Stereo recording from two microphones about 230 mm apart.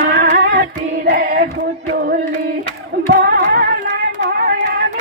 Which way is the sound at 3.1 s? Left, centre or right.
Right.